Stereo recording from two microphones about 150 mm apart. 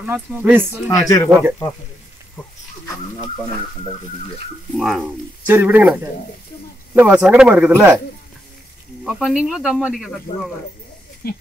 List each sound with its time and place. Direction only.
0.0 s speech: 10° right (ahead or behind)
0.8 s speech: 25° left (ahead or behind)
4.7 s speech: centre (ahead or behind)
5.5 s speech: 15° right (ahead or behind)
7.0 s speech: 5° right (ahead or behind)
9.0 s speech: 5° right (ahead or behind)